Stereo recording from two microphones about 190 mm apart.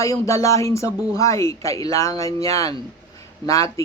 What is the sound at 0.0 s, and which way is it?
A man's voice, 15° left (ahead or behind).